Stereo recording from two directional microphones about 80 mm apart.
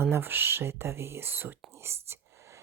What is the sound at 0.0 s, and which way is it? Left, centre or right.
Speech, right.